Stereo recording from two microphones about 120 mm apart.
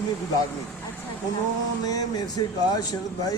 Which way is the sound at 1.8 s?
30° left (ahead or behind).